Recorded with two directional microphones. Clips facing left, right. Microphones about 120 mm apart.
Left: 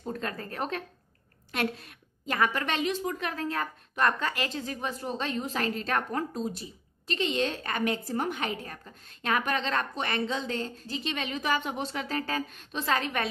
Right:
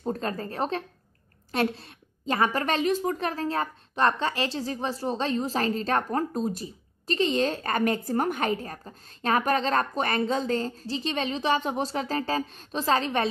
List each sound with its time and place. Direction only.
0.0 s a woman's voice: 35° right (ahead or behind)